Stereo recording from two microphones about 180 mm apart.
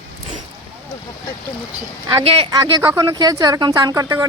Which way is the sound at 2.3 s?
30° right (ahead or behind).